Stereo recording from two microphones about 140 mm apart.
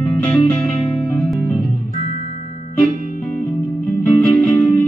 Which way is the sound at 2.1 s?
55° left (ahead or behind).